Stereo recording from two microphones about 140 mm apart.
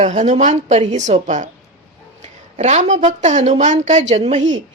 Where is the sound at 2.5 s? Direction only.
55° right (ahead or behind).